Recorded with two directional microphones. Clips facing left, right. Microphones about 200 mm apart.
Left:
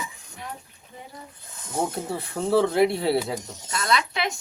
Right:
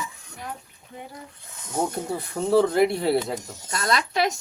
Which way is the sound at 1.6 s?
Centre (ahead or behind).